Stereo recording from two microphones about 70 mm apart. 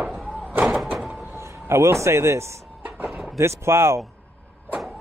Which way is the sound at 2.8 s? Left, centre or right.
Right.